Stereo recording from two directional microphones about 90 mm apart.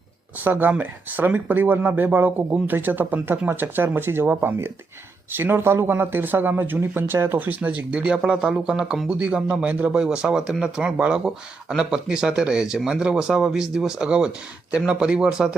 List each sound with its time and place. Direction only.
0.4 s speech: 20° right (ahead or behind)